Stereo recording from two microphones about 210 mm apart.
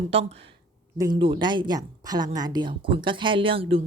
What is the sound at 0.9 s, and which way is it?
Speech, 20° right (ahead or behind).